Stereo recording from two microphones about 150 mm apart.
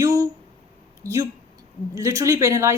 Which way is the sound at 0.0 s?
20° right (ahead or behind).